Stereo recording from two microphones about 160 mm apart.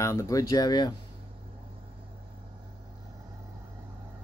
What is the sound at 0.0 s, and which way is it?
Speech, 20° left (ahead or behind).